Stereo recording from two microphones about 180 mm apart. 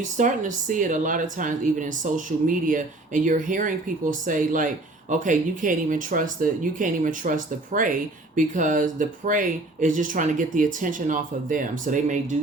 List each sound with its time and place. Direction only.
0.0 s speech: 45° right (ahead or behind)